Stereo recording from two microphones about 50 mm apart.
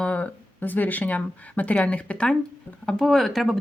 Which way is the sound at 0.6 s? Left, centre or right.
Left.